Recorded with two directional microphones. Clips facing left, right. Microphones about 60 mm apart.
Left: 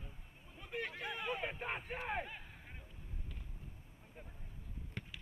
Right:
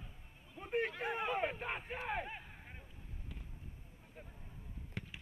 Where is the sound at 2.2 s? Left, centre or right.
Centre.